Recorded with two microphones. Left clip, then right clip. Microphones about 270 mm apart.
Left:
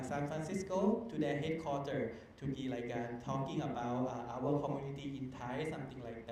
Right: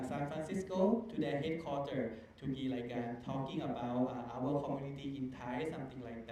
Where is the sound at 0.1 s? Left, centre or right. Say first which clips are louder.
Left 4 dB; left.